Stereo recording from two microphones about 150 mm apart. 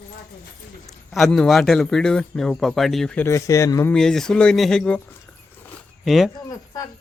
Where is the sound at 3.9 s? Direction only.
5° left (ahead or behind).